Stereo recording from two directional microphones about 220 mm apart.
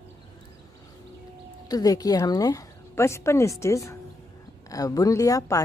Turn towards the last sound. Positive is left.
turn(degrees=15)  # may be behind; listen again after turning